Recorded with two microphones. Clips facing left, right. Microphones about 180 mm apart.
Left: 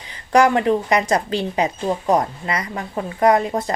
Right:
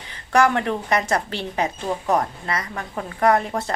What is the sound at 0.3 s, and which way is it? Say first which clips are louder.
A woman's voice: left 4 dB; 15° left (ahead or behind).